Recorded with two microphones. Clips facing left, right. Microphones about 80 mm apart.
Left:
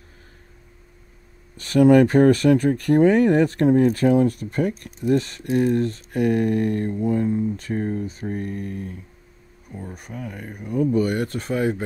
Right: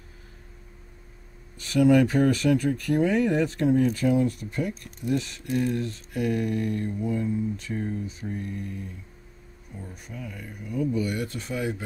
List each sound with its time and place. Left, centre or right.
1.6 s speech: left